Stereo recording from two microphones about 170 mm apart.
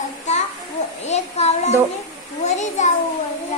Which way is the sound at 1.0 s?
40° left (ahead or behind).